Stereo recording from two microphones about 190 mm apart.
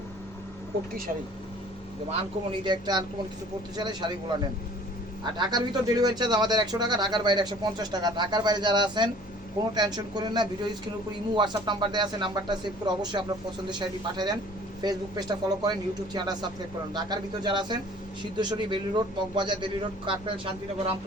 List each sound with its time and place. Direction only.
2.5 s speech: 20° right (ahead or behind)
5.2 s speech: 20° right (ahead or behind)
16.9 s speech: 25° right (ahead or behind)